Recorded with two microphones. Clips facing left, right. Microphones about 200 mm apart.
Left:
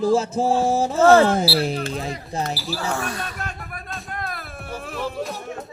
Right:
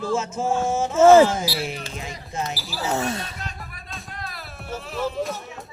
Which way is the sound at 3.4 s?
50° left (ahead or behind).